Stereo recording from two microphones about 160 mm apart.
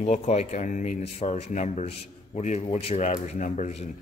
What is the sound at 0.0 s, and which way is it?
Speech, 45° left (ahead or behind).